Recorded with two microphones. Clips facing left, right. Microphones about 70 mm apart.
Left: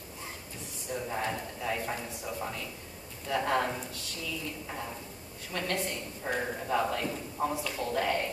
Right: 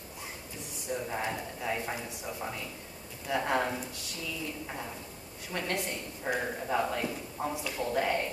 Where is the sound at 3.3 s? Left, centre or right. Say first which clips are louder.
Left 1 dB; centre.